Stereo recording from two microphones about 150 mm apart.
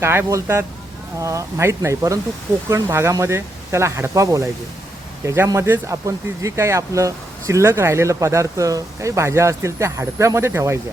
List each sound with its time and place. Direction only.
0.0 s speech: 15° right (ahead or behind)